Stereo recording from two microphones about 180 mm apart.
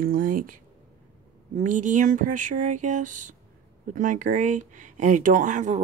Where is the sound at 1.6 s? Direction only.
45° right (ahead or behind).